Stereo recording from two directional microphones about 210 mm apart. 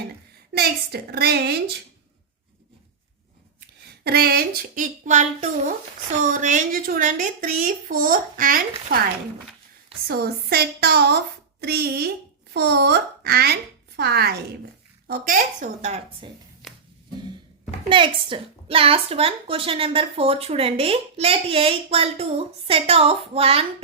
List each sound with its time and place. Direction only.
0.5 s a woman's voice: 50° right (ahead or behind)
4.0 s speech: 50° right (ahead or behind)
10.1 s a woman's voice: 50° right (ahead or behind); by 16.3 s 30° right (ahead or behind)
16.6 s a sound: centre (ahead or behind)
17.8 s a woman's voice: 25° right (ahead or behind)